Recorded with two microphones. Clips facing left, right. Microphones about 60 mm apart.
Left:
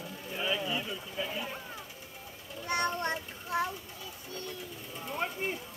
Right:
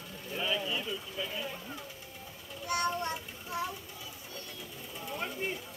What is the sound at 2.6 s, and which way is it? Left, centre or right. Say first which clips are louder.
Child singing: left 1 dB; left.